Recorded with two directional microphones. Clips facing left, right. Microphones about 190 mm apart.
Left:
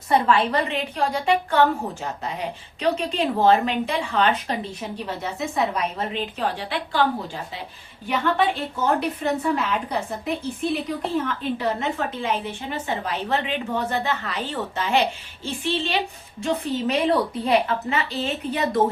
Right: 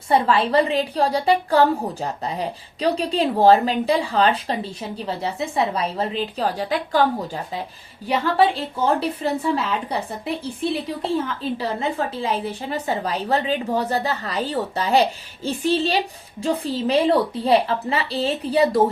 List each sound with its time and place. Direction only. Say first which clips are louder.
0.1 s a woman's voice: right 2 dB; 30° right (ahead or behind)